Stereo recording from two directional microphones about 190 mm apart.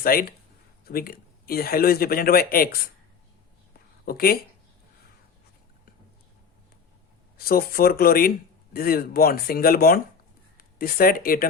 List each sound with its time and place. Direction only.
0.0 s speech: 50° left (ahead or behind)
4.0 s speech: 50° left (ahead or behind)
7.3 s speech: 50° left (ahead or behind)